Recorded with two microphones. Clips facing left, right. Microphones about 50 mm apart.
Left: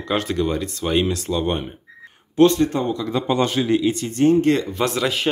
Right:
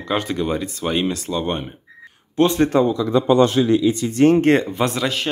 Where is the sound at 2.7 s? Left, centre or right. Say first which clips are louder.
Right 7 dB; right.